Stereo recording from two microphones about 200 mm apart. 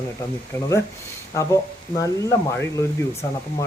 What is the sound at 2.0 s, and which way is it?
Speech, 15° left (ahead or behind).